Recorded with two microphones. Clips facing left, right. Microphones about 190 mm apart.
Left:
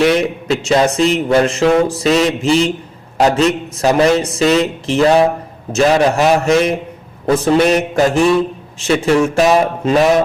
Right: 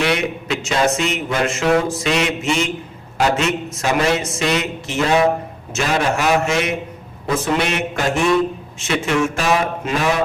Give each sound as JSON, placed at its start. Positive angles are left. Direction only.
{"t": 0.0, "sound": "a man's voice", "side_deg": 35}